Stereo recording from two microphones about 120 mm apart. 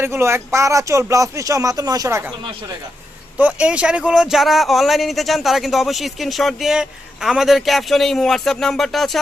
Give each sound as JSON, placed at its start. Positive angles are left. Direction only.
{"t": 0.0, "sound": "speech", "side_deg": -20}
{"t": 3.3, "sound": "speech", "side_deg": -10}